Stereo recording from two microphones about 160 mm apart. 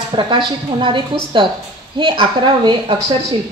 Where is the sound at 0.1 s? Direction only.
30° right (ahead or behind).